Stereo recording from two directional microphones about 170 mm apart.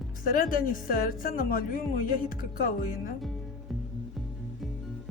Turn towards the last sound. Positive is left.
turn(degrees=55)  # may be behind; listen again after turning